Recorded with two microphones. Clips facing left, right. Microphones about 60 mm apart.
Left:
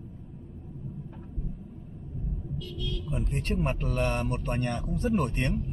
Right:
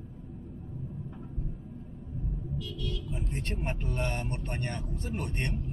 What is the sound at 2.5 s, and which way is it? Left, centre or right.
Speech, left.